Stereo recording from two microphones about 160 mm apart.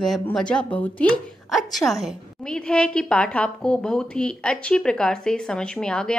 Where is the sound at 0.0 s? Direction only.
Centre (ahead or behind).